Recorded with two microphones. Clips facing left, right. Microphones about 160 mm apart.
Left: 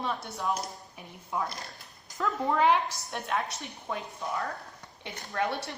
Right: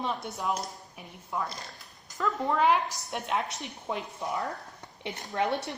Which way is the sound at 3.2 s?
20° right (ahead or behind).